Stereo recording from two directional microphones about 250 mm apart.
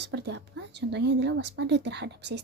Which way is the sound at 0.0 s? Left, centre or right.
Right.